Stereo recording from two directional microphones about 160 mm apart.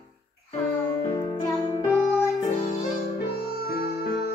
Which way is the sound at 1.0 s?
20° left (ahead or behind).